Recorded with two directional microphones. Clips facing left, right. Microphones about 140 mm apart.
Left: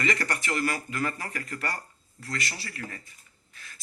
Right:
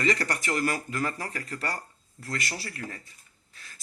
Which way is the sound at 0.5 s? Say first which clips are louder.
Right 1 dB; 40° right (ahead or behind).